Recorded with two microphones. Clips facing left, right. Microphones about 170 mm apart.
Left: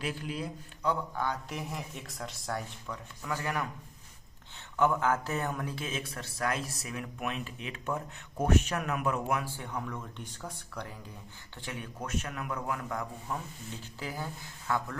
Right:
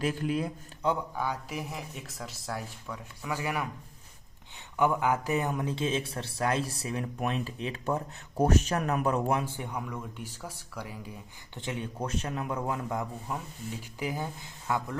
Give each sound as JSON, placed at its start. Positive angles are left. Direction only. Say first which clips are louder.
{"t": 0.0, "sound": "a man's voice", "louder": "right 6 dB", "side_deg": -50}
{"t": 1.1, "sound": "speech", "louder": "right 1 dB", "side_deg": -10}
{"t": 4.8, "sound": "speech", "louder": "right 1 dB", "side_deg": -15}
{"t": 9.4, "sound": "speech", "louder": "right 2 dB", "side_deg": -20}
{"t": 11.5, "sound": "a man's voice", "louder": "right 5 dB", "side_deg": -25}